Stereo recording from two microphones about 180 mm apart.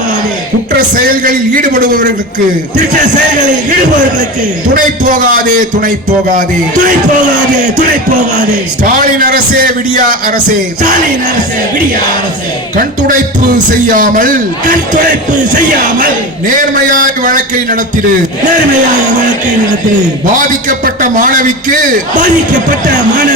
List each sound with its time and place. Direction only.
0.9 s a man's voice: 50° right (ahead or behind)
4.7 s a man's voice: 50° right (ahead or behind)
12.7 s a man's voice: 45° right (ahead or behind)
16.5 s a man's voice: 50° right (ahead or behind)
20.5 s a man's voice: 50° right (ahead or behind)